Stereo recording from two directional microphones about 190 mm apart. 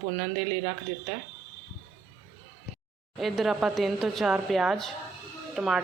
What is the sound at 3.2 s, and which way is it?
A woman's voice, centre (ahead or behind).